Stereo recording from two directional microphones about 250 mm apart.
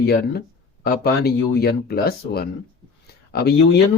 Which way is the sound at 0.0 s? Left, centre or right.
Left.